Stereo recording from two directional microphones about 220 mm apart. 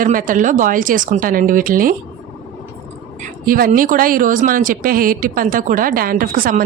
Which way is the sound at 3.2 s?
40° right (ahead or behind).